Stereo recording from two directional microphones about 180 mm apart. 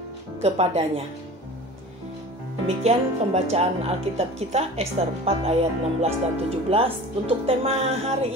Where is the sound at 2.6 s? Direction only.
35° right (ahead or behind).